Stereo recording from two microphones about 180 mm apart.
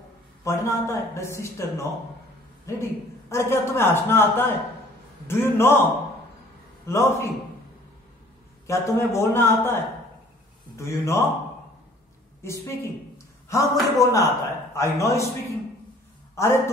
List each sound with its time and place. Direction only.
0.4 s a man's voice: 15° left (ahead or behind)
6.9 s a man's voice: 15° left (ahead or behind)
8.6 s a man's voice: 15° left (ahead or behind)
10.8 s a man's voice: 15° left (ahead or behind)
12.4 s a man's voice: 15° left (ahead or behind)
16.3 s a man's voice: 15° left (ahead or behind)